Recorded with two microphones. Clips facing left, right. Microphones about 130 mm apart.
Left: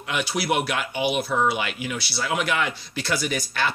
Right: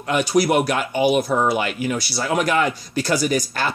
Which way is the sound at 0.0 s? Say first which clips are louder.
Right 9 dB; 45° right (ahead or behind).